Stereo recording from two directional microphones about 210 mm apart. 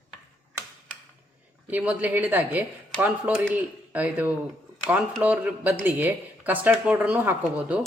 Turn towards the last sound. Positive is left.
turn(degrees=-5)  # may be behind; listen again after turning